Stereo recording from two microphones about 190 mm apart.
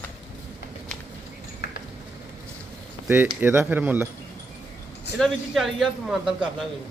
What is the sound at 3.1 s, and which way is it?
Speech, 10° right (ahead or behind).